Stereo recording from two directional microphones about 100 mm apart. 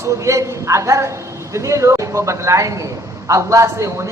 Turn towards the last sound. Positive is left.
turn(degrees=-30)  # may be behind; listen again after turning